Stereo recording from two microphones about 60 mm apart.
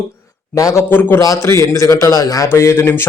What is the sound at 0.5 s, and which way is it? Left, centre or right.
Speech, left.